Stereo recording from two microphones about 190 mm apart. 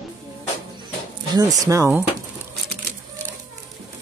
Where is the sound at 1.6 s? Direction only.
15° right (ahead or behind).